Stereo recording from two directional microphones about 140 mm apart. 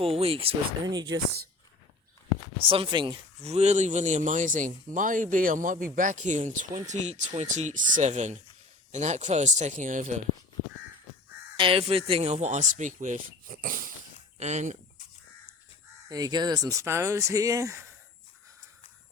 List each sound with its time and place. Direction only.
0.0 s speech: 45° right (ahead or behind)
0.9 s speech: 30° right (ahead or behind)
2.6 s speech: 40° right (ahead or behind)
3.4 s speech: 50° right (ahead or behind)
11.5 s speech: 40° right (ahead or behind); by 13.9 s 75° right (ahead or behind)
14.3 s speech: 55° right (ahead or behind)
16.0 s speech: 25° right (ahead or behind)